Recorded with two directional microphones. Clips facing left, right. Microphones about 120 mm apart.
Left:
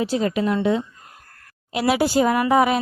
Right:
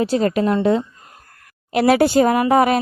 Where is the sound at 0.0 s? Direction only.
50° right (ahead or behind).